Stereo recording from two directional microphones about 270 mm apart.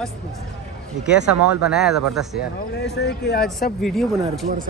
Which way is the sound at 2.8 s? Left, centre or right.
Left.